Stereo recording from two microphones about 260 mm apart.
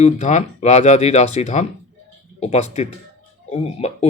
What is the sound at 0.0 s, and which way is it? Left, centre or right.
Speech, left.